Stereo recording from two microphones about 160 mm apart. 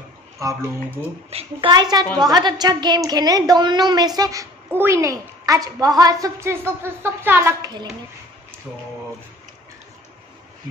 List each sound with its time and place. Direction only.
0.4 s a woman's voice: 20° right (ahead or behind)
1.3 s a woman's voice: 30° right (ahead or behind); by 7.7 s 15° right (ahead or behind)